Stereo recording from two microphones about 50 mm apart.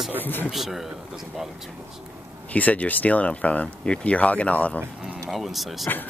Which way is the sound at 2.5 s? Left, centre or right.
Left.